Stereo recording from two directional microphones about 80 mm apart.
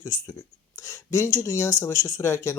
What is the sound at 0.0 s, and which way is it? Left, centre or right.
Speech, left.